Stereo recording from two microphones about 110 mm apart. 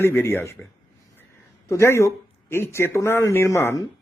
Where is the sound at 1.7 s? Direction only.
25° left (ahead or behind).